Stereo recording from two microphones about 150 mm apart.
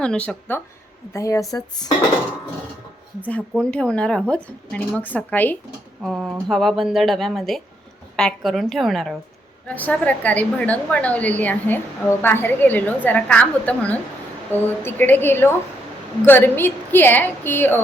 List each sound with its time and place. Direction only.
0.0 s a woman's voice: 5° left (ahead or behind)
1.1 s speech: 20° left (ahead or behind)
3.2 s a woman's voice: 10° left (ahead or behind)
6.0 s a woman's voice: centre (ahead or behind)